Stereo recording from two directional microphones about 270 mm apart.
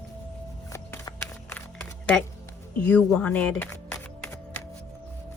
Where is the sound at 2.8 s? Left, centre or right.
Centre.